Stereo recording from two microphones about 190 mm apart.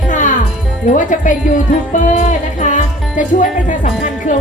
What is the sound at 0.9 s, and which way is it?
Speech, 40° left (ahead or behind).